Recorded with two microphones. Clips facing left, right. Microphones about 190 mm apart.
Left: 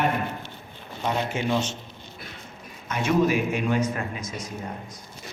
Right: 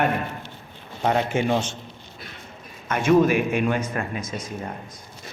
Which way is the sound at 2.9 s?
55° right (ahead or behind).